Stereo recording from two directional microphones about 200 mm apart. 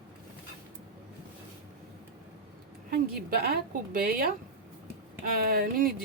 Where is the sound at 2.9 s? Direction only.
50° right (ahead or behind).